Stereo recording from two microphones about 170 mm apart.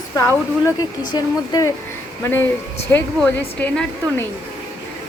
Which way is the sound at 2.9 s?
10° left (ahead or behind).